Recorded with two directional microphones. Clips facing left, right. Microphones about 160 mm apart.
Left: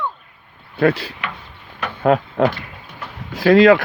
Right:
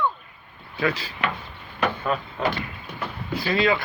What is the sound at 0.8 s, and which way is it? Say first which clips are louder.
Speech: left 9 dB; 60° left (ahead or behind).